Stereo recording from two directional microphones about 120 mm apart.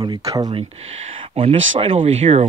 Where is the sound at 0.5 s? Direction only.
50° right (ahead or behind).